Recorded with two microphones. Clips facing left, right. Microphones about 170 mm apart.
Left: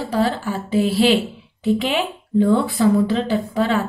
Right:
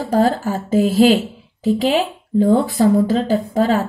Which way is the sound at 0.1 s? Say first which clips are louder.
Right 5 dB; 45° right (ahead or behind).